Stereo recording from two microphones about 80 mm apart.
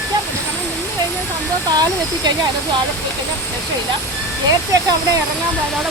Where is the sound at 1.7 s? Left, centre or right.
Right.